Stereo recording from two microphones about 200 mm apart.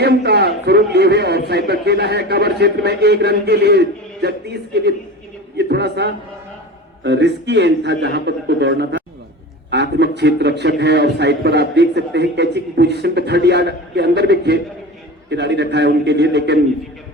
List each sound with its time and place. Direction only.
0.0 s a man's voice: 55° right (ahead or behind)